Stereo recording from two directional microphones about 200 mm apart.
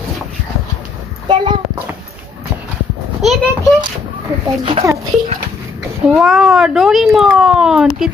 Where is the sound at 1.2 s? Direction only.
20° right (ahead or behind).